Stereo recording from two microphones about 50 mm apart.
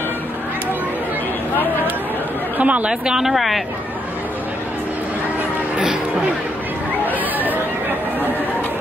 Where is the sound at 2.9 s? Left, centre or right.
Centre.